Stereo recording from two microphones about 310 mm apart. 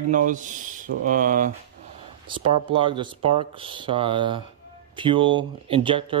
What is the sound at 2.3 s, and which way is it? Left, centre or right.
Speech, centre.